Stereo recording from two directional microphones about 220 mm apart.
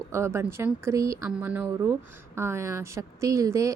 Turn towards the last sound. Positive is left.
turn(degrees=-15)  # may be behind; listen again after turning